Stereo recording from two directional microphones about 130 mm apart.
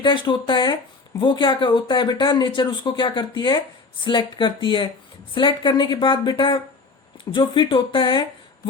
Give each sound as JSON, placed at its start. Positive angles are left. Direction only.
{"t": 0.0, "sound": "speech", "side_deg": 40}